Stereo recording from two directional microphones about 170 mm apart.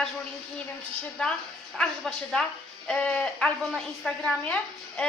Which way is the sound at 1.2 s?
5° left (ahead or behind).